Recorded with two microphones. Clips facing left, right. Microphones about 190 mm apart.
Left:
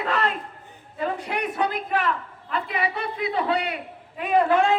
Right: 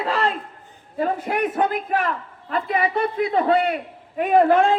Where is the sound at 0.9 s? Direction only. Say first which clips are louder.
Right 5 dB; 45° right (ahead or behind).